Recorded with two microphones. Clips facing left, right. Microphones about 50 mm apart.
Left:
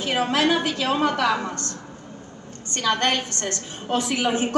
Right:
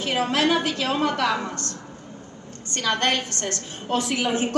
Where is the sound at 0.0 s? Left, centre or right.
Left.